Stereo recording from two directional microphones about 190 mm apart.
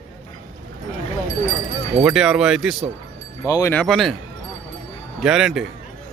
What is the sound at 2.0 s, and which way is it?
Speech, 5° right (ahead or behind).